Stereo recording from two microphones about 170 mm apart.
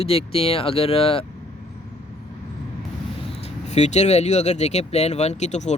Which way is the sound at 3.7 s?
40° left (ahead or behind).